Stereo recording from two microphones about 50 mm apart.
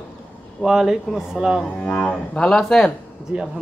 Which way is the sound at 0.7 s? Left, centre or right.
Centre.